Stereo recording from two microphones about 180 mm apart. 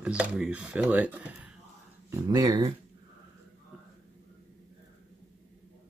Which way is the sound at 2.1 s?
20° right (ahead or behind).